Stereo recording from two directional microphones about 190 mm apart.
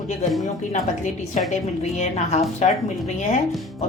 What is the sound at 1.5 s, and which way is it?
A woman's voice, 35° left (ahead or behind).